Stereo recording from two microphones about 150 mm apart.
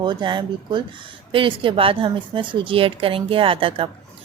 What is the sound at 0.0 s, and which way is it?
A woman's voice, 30° right (ahead or behind).